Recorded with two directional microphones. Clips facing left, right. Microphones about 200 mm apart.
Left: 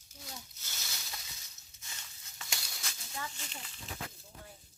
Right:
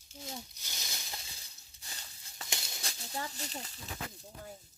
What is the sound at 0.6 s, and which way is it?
Snake, 15° right (ahead or behind).